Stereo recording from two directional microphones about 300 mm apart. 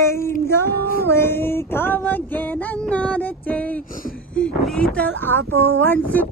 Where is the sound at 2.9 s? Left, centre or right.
Centre.